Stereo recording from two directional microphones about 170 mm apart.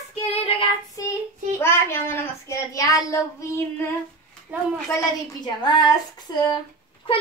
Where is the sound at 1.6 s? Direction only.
15° left (ahead or behind).